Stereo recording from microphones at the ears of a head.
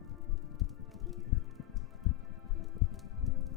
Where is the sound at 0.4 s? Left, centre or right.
Left.